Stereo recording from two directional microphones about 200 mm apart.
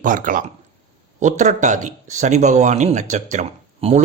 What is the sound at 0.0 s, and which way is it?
Speech, 40° right (ahead or behind).